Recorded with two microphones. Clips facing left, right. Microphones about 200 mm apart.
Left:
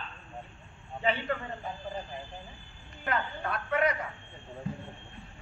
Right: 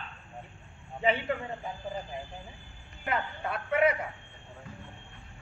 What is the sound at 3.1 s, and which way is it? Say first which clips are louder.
Speech: even; 10° right (ahead or behind).